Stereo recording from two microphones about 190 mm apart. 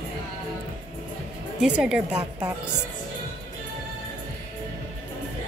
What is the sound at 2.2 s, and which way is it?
Speech, 20° right (ahead or behind).